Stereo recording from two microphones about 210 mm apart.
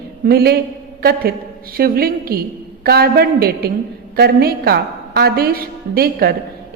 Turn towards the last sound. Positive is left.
turn(degrees=-45)  # may be behind; listen again after turning